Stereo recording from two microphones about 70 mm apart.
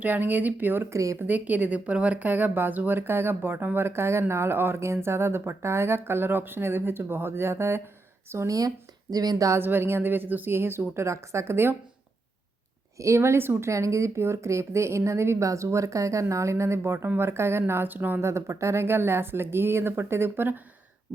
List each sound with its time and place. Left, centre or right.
0.0 s speech: right
0.9 s speech: right
1.3 s speech: right
8.4 s speech: right
9.6 s speech: right
13.0 s speech: right
18.2 s speech: right